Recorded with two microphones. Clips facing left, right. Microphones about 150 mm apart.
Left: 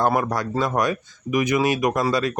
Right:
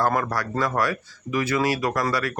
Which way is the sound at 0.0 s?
20° left (ahead or behind).